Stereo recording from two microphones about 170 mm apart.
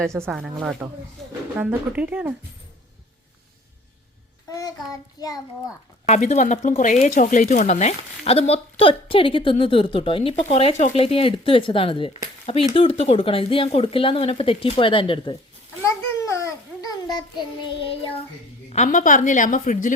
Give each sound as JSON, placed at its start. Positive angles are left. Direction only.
{"t": 0.0, "sound": "speech", "side_deg": -15}
{"t": 0.3, "sound": "speech", "side_deg": 0}
{"t": 4.4, "sound": "child singing", "side_deg": 20}
{"t": 5.2, "sound": "a child's voice", "side_deg": 20}
{"t": 6.1, "sound": "speech", "side_deg": 45}
{"t": 15.8, "sound": "babbling", "side_deg": 20}
{"t": 18.7, "sound": "a woman's voice", "side_deg": 45}